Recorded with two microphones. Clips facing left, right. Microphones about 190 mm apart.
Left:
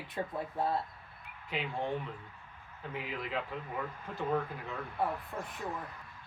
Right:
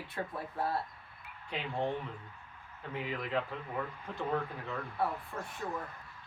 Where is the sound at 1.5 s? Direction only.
5° left (ahead or behind).